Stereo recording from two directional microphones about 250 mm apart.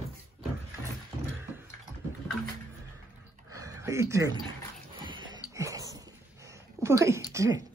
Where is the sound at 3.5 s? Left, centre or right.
Centre.